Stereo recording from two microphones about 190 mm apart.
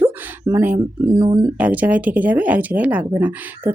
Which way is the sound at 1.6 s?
10° right (ahead or behind).